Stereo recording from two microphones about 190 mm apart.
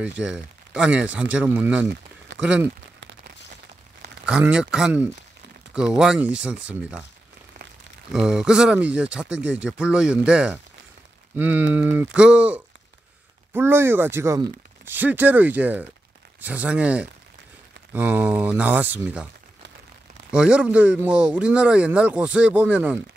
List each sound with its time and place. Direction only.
0.0 s speech: 5° right (ahead or behind)
3.0 s a sound: 65° right (ahead or behind)
4.3 s speech: 5° right (ahead or behind)
8.1 s speech: 5° right (ahead or behind)
20.2 s speech: 5° right (ahead or behind)